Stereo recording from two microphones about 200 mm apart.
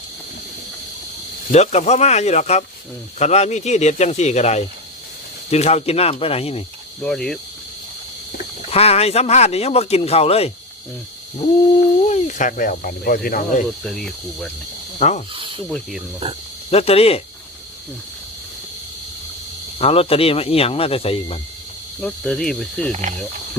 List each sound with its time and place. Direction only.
1.5 s a man's voice: 35° left (ahead or behind)
7.0 s snake: 5° left (ahead or behind)
8.7 s a man's voice: 30° left (ahead or behind)
12.0 s a man's voice: 35° left (ahead or behind)
13.8 s snake: centre (ahead or behind)
14.9 s speech: 35° left (ahead or behind)
15.3 s snake: 25° right (ahead or behind)
15.7 s snake: centre (ahead or behind)
16.7 s speech: 30° left (ahead or behind)
19.8 s speech: 30° left (ahead or behind)
22.0 s snake: 5° left (ahead or behind)
22.9 s cricket: 35° right (ahead or behind)